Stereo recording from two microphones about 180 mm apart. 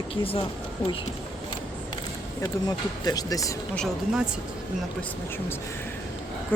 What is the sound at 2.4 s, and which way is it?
Speech, 20° left (ahead or behind).